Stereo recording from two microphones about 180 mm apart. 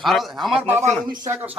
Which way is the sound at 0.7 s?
20° right (ahead or behind).